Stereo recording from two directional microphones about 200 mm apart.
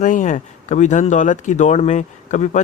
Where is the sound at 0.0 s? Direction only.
40° left (ahead or behind).